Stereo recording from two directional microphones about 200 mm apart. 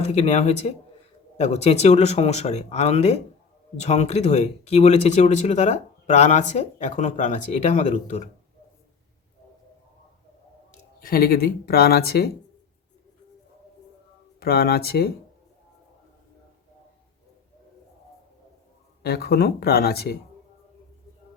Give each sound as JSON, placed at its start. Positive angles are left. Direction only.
{"t": 0.0, "sound": "speech", "side_deg": 35}
{"t": 11.0, "sound": "speech", "side_deg": 50}
{"t": 14.3, "sound": "speech", "side_deg": 50}
{"t": 19.0, "sound": "speech", "side_deg": 50}